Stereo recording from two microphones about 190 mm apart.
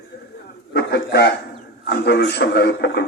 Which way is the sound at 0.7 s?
55° left (ahead or behind).